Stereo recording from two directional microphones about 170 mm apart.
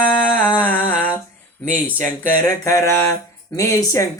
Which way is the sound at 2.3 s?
20° left (ahead or behind).